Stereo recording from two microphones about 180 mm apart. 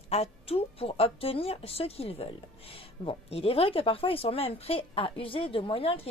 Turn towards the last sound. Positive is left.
turn(degrees=30)  # may be behind; listen again after turning